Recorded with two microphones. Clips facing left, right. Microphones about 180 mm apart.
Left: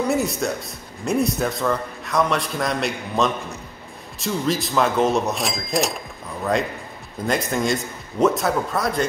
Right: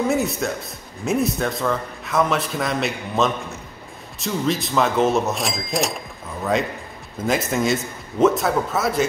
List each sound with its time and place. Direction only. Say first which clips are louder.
0.1 s a man's voice: even; centre (ahead or behind)